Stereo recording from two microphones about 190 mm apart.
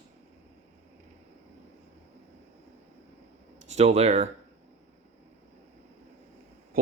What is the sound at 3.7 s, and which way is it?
Speech, 35° right (ahead or behind).